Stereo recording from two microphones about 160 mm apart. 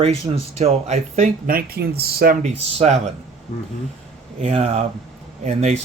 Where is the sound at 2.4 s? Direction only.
45° right (ahead or behind).